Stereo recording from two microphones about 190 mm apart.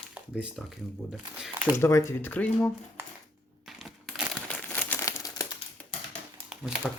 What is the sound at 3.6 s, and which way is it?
Crumpling, centre (ahead or behind).